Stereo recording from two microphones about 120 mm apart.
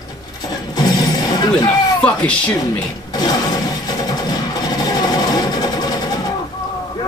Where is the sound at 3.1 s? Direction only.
35° left (ahead or behind).